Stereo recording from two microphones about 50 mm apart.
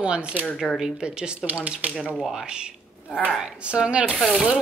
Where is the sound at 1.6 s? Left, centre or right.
Right.